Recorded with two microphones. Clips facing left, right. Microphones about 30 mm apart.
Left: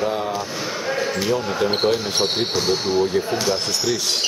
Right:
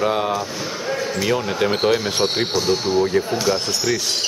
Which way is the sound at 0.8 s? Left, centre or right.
Centre.